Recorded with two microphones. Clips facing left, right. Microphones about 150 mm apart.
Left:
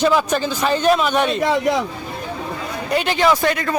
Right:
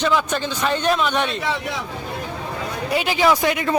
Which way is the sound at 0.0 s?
5° left (ahead or behind).